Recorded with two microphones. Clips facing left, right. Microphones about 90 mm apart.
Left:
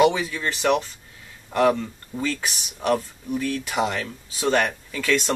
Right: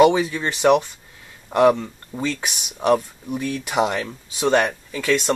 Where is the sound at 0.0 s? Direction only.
30° right (ahead or behind).